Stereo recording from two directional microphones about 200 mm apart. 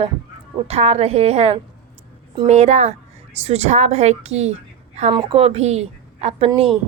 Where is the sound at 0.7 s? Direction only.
30° right (ahead or behind).